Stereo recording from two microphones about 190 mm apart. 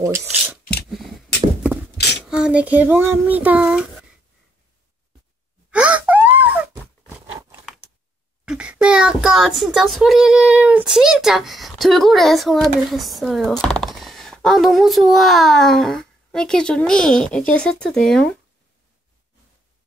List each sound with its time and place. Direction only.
0.0 s speech: 15° right (ahead or behind)
0.8 s a sound: centre (ahead or behind)
2.2 s child singing: 5° right (ahead or behind)
5.7 s wail: 5° right (ahead or behind)
7.2 s crumpling: 5° right (ahead or behind)
8.5 s a child's voice: 5° right (ahead or behind)